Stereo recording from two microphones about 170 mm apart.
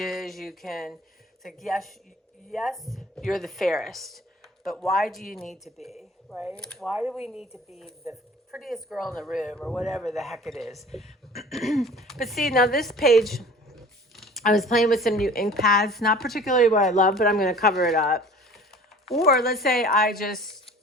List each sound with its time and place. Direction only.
0.0 s speech: centre (ahead or behind)
16.6 s speech: 50° left (ahead or behind)
17.1 s speech: centre (ahead or behind)
19.4 s speech: centre (ahead or behind)
19.8 s a woman's voice: 60° left (ahead or behind)